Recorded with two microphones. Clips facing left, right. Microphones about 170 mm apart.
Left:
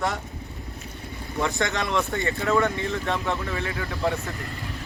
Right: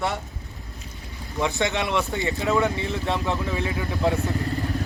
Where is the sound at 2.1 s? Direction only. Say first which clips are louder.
Even; 15° right (ahead or behind).